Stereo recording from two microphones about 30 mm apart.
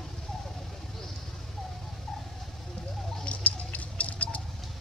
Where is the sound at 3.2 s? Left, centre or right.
Left.